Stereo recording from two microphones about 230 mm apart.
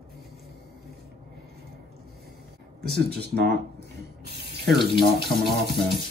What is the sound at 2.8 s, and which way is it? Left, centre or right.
Speech, right.